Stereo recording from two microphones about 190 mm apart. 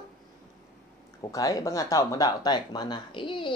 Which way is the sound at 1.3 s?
20° left (ahead or behind).